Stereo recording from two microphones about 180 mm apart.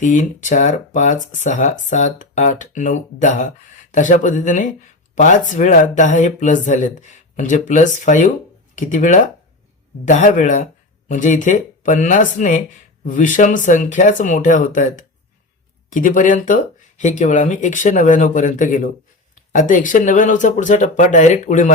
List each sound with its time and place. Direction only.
0.0 s speech: 45° left (ahead or behind)